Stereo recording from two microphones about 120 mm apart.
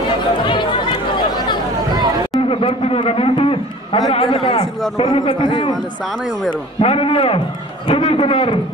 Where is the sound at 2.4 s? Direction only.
50° left (ahead or behind).